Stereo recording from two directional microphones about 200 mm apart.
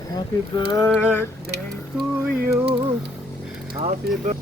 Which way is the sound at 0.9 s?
5° right (ahead or behind).